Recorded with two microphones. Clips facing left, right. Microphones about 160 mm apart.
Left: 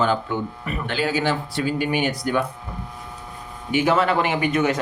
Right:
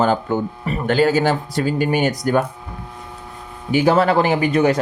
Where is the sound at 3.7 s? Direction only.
35° right (ahead or behind).